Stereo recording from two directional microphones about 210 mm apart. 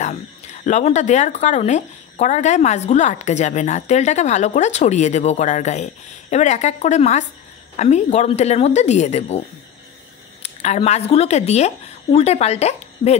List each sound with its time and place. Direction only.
0.7 s a woman's voice: 35° left (ahead or behind)
10.4 s speech: 30° left (ahead or behind)